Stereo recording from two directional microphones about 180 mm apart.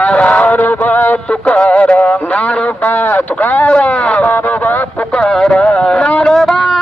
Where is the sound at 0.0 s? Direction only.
5° left (ahead or behind).